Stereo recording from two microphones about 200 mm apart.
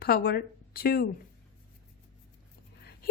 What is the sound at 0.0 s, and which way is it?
Speech, 50° left (ahead or behind).